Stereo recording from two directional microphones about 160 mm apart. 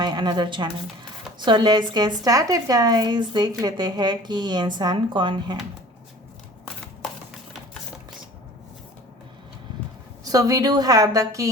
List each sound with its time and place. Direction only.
0.0 s a woman's voice: 25° right (ahead or behind)
10.2 s a woman's voice: 20° right (ahead or behind)